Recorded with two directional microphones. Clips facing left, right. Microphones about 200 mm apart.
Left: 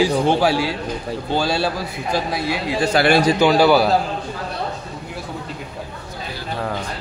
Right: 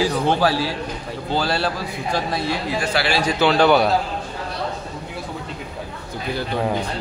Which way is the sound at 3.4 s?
10° left (ahead or behind).